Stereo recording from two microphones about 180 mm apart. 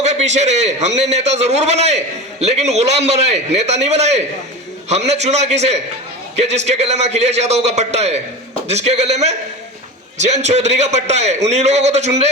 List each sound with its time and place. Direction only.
0.0 s a man's voice: 40° right (ahead or behind)